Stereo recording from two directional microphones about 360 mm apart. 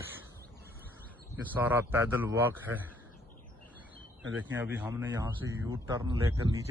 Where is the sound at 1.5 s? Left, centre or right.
Centre.